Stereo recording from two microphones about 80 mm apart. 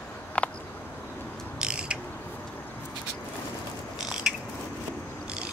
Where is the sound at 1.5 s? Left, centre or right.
Centre.